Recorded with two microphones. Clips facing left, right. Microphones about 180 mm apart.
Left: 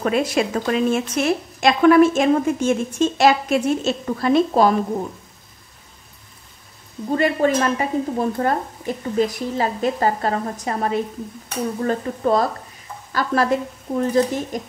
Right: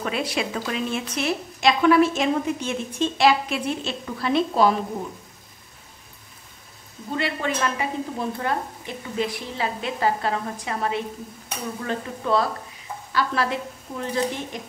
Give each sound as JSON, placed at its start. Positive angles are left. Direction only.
{"t": 0.0, "sound": "a woman's voice", "side_deg": 45}
{"t": 7.1, "sound": "a woman's voice", "side_deg": 45}